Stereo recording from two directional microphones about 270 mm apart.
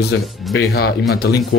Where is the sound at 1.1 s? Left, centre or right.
Left.